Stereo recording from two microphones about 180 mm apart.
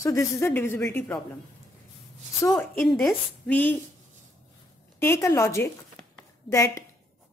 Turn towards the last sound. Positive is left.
turn(degrees=15)  # may be behind; listen again after turning